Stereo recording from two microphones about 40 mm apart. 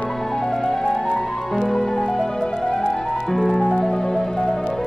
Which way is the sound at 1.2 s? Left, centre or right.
Centre.